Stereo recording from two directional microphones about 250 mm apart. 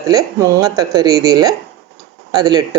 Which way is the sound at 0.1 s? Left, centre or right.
Centre.